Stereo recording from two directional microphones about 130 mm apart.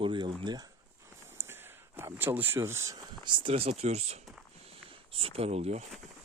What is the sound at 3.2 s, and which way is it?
Speech, 40° right (ahead or behind).